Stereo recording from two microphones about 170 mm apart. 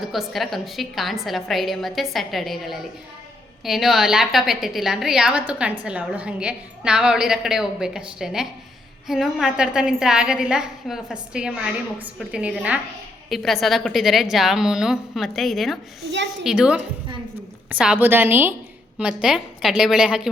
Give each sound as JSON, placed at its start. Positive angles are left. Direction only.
{"t": 0.1, "sound": "a woman's voice", "side_deg": 0}